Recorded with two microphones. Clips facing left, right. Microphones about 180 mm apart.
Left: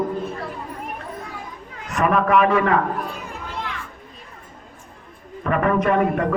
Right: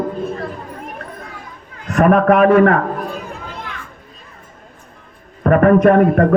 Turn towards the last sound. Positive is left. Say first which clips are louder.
# right 8 dB
turn(degrees=-50)  # may be behind; listen again after turning